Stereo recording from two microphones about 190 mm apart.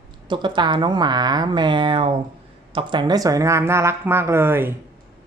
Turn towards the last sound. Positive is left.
turn(degrees=-10)  # may be behind; listen again after turning